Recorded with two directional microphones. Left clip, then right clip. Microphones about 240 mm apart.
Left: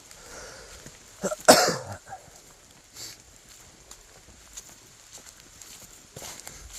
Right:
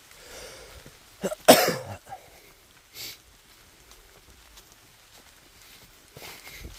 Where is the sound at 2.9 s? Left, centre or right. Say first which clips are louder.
Right 3 dB; right.